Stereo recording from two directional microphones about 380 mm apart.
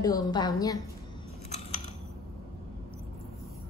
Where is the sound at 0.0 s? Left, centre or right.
Centre.